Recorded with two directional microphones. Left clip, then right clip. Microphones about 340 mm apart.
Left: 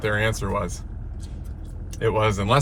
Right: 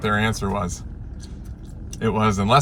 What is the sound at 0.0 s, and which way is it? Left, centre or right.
Speech, centre.